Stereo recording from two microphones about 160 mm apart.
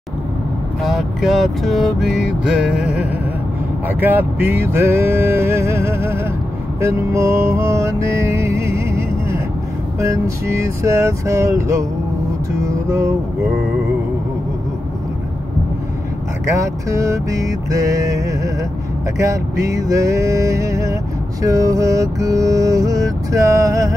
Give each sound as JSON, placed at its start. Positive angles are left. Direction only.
{"t": 0.8, "sound": "vehicle", "side_deg": 0}
{"t": 3.8, "sound": "speech", "side_deg": -10}
{"t": 6.8, "sound": "music", "side_deg": -15}
{"t": 9.9, "sound": "mantra", "side_deg": -20}
{"t": 12.5, "sound": "music", "side_deg": -20}
{"t": 16.5, "sound": "mantra", "side_deg": -20}